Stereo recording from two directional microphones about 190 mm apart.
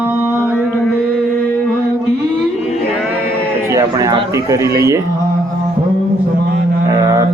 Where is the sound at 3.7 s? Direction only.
15° right (ahead or behind).